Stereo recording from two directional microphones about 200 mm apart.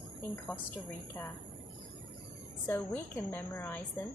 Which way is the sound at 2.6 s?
10° left (ahead or behind).